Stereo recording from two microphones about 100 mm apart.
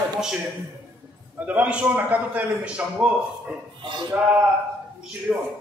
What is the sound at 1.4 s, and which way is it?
A man's voice, 15° right (ahead or behind).